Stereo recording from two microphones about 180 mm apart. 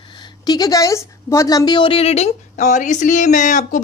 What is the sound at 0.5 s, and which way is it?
A woman's voice, 20° left (ahead or behind).